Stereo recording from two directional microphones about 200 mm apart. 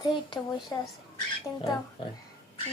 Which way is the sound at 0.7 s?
15° left (ahead or behind).